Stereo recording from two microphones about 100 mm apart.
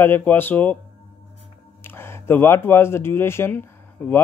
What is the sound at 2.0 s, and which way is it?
A man's voice, 25° left (ahead or behind).